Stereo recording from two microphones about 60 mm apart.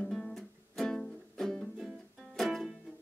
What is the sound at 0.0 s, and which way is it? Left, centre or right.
Music, centre.